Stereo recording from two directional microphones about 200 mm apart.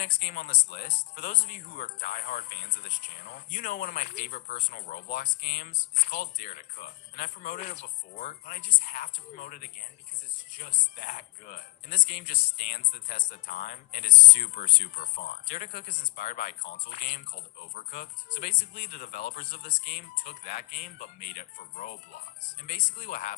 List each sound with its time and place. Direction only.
0.0 s speech: 45° left (ahead or behind)